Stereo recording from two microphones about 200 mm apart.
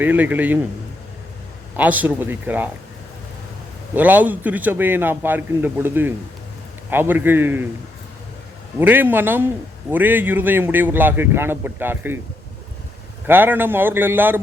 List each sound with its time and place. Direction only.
0.0 s a man's voice: 10° right (ahead or behind)
1.7 s a man's voice: 10° right (ahead or behind)
3.9 s a man's voice: 10° right (ahead or behind)
8.8 s a man's voice: 10° right (ahead or behind)
13.2 s a man's voice: 10° right (ahead or behind)